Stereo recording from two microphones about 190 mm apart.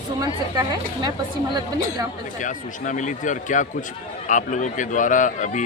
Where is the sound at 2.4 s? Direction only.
40° left (ahead or behind).